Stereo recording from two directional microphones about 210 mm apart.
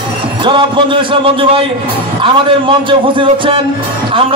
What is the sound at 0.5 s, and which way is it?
A man's voice, 25° right (ahead or behind).